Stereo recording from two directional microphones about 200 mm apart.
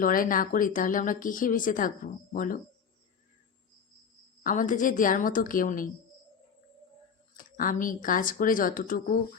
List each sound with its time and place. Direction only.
0.0 s speech: 45° left (ahead or behind)
4.4 s speech: 40° left (ahead or behind)
7.3 s speech: 45° left (ahead or behind)